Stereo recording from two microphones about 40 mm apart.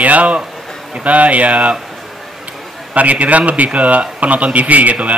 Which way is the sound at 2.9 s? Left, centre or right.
Right.